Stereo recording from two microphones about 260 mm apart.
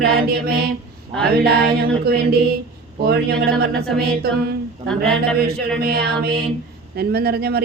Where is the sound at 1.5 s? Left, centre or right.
Right.